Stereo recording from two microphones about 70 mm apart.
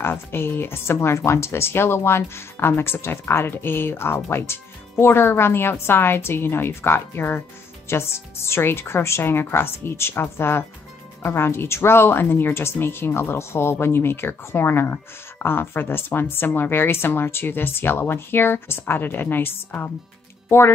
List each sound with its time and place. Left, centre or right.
0.0 s speech: left